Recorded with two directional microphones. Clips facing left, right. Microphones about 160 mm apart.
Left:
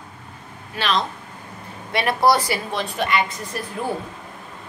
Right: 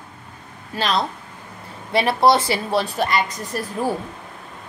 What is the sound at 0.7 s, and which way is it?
A woman's voice, 35° right (ahead or behind).